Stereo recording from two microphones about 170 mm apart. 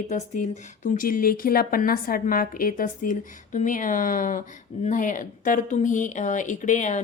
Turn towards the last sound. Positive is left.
turn(degrees=45)  # may be behind; listen again after turning